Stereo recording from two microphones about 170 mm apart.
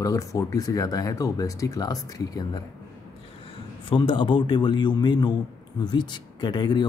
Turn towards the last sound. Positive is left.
turn(degrees=25)  # may be behind; listen again after turning